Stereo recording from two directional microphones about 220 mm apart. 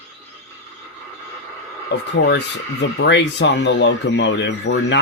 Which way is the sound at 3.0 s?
55° left (ahead or behind).